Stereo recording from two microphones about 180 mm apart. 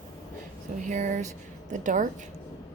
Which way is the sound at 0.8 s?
45° right (ahead or behind).